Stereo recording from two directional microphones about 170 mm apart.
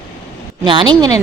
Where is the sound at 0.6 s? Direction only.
25° right (ahead or behind).